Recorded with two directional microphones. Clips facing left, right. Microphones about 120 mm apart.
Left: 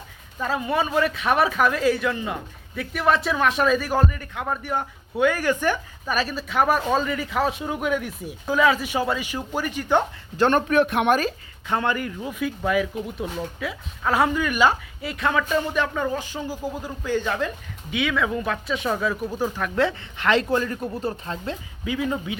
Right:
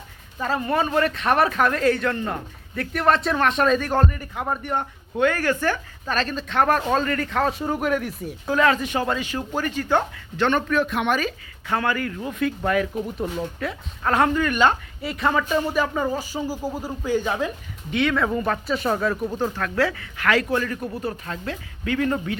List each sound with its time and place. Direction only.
0.3 s speech: centre (ahead or behind)
4.2 s speech: 5° right (ahead or behind); by 10.1 s 15° left (ahead or behind)
10.3 s a man's voice: 40° left (ahead or behind)
10.7 s speech: 60° left (ahead or behind); by 11.3 s 45° left (ahead or behind)
11.7 s speech: 20° left (ahead or behind)
12.4 s speech: 5° left (ahead or behind)
16.6 s speech: 40° right (ahead or behind)
17.1 s speech: 10° right (ahead or behind)
17.9 s speech: centre (ahead or behind); by 21.6 s 25° left (ahead or behind)
21.8 s speech: 10° left (ahead or behind)